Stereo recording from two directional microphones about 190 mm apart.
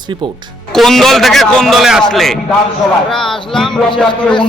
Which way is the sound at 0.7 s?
Centre (ahead or behind).